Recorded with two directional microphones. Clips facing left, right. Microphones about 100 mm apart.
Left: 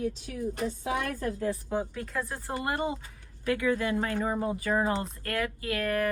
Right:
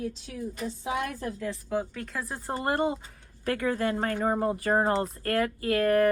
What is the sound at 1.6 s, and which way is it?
Speech, 10° left (ahead or behind).